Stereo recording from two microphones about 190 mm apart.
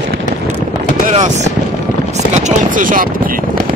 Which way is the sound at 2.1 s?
40° right (ahead or behind).